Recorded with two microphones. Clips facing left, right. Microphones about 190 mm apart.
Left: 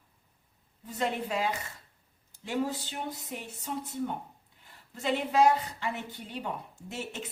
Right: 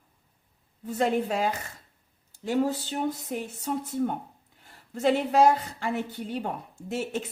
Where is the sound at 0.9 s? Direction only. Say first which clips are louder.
Right 6 dB; 45° right (ahead or behind).